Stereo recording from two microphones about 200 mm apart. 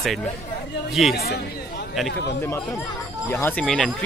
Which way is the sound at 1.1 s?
55° left (ahead or behind).